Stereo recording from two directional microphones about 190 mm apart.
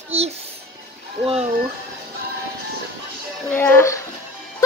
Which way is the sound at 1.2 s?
30° right (ahead or behind).